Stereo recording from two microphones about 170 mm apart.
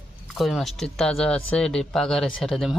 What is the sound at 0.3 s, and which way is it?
Speech, centre (ahead or behind).